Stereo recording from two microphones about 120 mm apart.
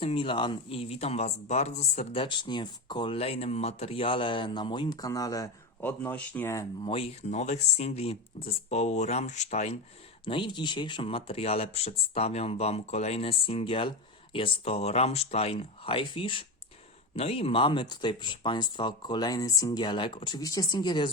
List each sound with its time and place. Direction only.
0.0 s speech: 50° left (ahead or behind)
2.2 s speech: 40° left (ahead or behind)
3.2 s speech: 55° left (ahead or behind); by 5.5 s 30° left (ahead or behind)
5.8 s speech: 10° left (ahead or behind)
6.8 s speech: 55° left (ahead or behind); by 9.7 s 70° left (ahead or behind)
10.2 s speech: 45° left (ahead or behind)